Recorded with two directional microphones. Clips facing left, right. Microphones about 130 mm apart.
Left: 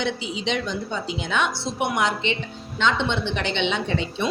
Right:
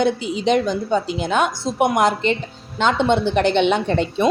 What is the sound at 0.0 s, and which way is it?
A woman's voice, 50° right (ahead or behind).